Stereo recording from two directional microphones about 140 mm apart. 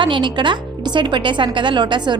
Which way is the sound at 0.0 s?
35° right (ahead or behind).